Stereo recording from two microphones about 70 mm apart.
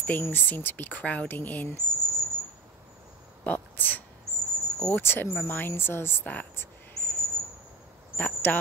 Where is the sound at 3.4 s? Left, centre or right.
Left.